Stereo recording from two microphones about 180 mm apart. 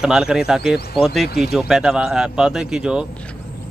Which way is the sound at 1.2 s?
60° left (ahead or behind).